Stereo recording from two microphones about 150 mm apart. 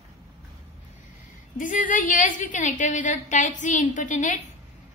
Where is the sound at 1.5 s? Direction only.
60° left (ahead or behind).